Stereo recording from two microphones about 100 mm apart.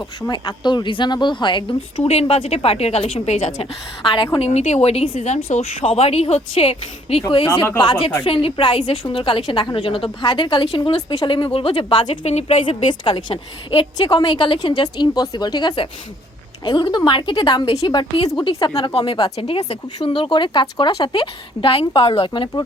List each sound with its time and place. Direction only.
0.2 s a woman's voice: 45° left (ahead or behind)
2.0 s a woman's voice: 90° left; by 7.4 s 70° left (ahead or behind)
7.8 s a woman's voice: 55° left (ahead or behind); by 12.6 s 90° left
12.6 s a woman's voice: 55° left (ahead or behind)
18.9 s a woman's voice: 60° left (ahead or behind)
20.1 s a woman's voice: 60° left (ahead or behind)
22.2 s a woman's voice: 50° left (ahead or behind)